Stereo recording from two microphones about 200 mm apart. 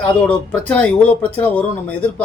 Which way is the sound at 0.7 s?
5° left (ahead or behind).